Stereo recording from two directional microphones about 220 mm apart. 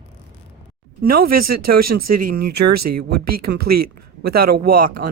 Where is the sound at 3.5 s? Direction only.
50° right (ahead or behind).